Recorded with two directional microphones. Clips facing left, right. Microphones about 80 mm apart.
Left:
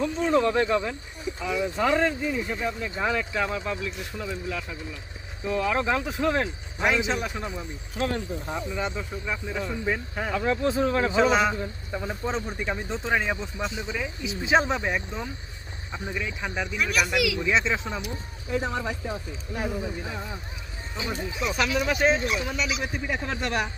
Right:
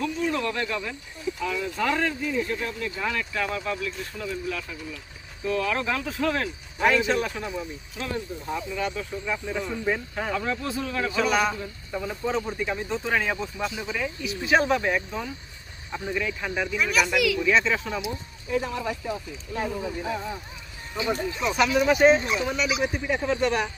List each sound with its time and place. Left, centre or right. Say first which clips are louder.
0.0 s a man's voice: left 4 dB; left
8.5 s a man's voice: right 1 dB; left
9.2 s speech: right 2 dB; centre
10.4 s a man's voice: left 5 dB; left
16.7 s speech: right 1 dB; centre
17.4 s a man's voice: right 2 dB; left
21.4 s speech: right 3 dB; centre